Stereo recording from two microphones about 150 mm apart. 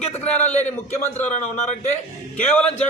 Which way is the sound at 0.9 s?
45° left (ahead or behind).